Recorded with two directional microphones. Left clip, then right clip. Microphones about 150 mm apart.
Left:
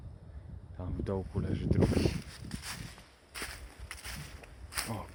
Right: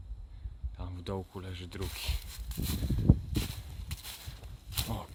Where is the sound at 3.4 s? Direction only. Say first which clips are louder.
Left 1 dB; 5° right (ahead or behind).